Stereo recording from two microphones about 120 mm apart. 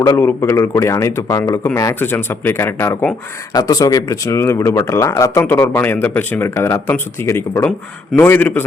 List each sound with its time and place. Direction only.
0.2 s speech: 20° left (ahead or behind)
3.5 s speech: 30° left (ahead or behind); by 8.6 s 15° left (ahead or behind)